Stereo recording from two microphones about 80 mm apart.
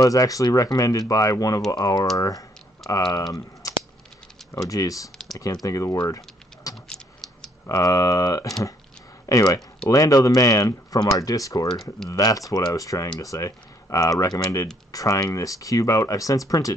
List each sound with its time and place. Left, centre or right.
0.0 s speech: left
4.6 s speech: left
5.1 s computer keyboard: centre
5.4 s speech: left
6.0 s a sound: left
6.7 s gears: centre
7.8 s speech: left